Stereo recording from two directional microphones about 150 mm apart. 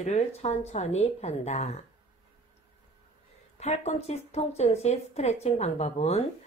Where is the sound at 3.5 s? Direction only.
45° left (ahead or behind).